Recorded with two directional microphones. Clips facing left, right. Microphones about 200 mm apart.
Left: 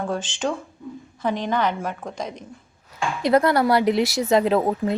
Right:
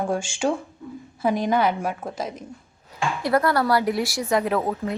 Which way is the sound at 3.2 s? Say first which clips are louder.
Left 3 dB; 20° left (ahead or behind).